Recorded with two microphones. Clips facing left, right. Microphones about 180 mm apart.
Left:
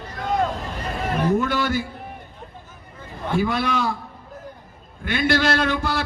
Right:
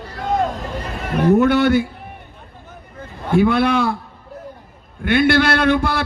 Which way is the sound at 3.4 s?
60° right (ahead or behind).